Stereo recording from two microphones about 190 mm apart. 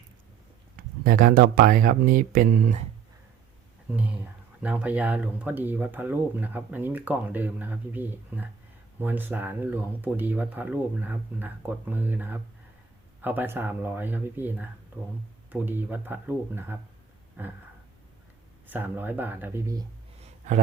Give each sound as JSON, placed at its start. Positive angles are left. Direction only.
{"t": 0.8, "sound": "speech", "side_deg": -45}
{"t": 3.9, "sound": "speech", "side_deg": -10}
{"t": 18.7, "sound": "speech", "side_deg": -10}